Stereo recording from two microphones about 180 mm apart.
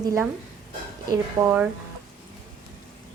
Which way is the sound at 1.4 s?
20° right (ahead or behind).